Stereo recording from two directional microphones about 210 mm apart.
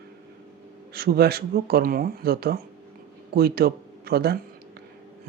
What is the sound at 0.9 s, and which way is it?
A man's voice, 45° right (ahead or behind).